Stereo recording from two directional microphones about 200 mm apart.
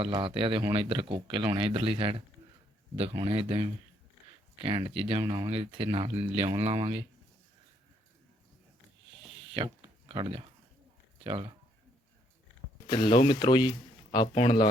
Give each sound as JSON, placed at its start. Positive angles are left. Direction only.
{"t": 0.0, "sound": "speech", "side_deg": -25}
{"t": 9.6, "sound": "a sound", "side_deg": -25}
{"t": 11.2, "sound": "speech", "side_deg": -25}
{"t": 12.9, "sound": "speech", "side_deg": 25}